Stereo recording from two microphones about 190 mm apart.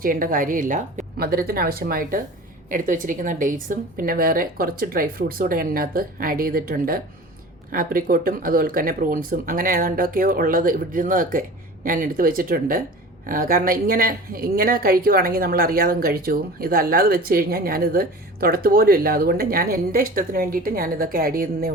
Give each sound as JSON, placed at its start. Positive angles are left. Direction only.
{"t": 0.0, "sound": "a woman's voice", "side_deg": -45}